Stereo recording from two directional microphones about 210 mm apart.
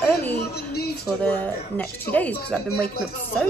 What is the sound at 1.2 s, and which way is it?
Speech, 5° left (ahead or behind).